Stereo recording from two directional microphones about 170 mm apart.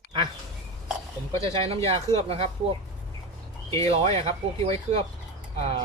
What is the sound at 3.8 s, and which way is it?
Speech, 35° right (ahead or behind).